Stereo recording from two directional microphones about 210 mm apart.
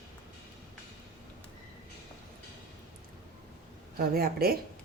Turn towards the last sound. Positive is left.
turn(degrees=-45)  # may be behind; listen again after turning